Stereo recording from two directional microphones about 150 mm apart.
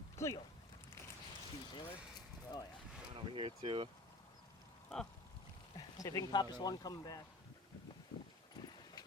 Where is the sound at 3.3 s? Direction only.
35° right (ahead or behind).